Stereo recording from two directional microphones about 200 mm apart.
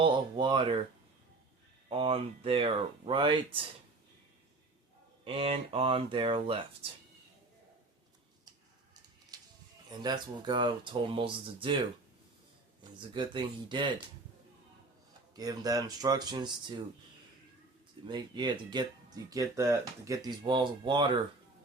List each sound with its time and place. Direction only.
0.0 s speech: 25° right (ahead or behind)
1.9 s speech: 25° right (ahead or behind)
5.2 s speech: 25° right (ahead or behind)
10.0 s speech: 20° right (ahead or behind)
13.0 s speech: 25° right (ahead or behind)
15.4 s speech: 20° right (ahead or behind)
18.0 s speech: 25° right (ahead or behind)